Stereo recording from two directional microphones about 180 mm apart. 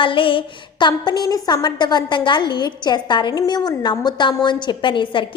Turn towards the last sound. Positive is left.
turn(degrees=25)  # may be behind; listen again after turning